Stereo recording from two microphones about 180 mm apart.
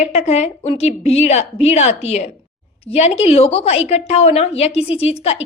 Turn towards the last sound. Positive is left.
turn(degrees=35)  # may be behind; listen again after turning